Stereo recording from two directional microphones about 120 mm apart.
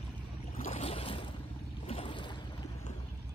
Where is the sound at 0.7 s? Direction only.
50° left (ahead or behind).